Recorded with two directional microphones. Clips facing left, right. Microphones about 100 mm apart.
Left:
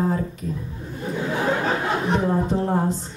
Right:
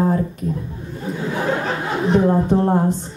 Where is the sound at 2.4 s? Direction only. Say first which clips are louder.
Right 6 dB; 50° right (ahead or behind).